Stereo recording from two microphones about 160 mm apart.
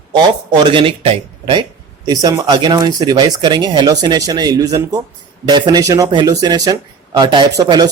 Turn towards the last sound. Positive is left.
turn(degrees=-25)  # may be behind; listen again after turning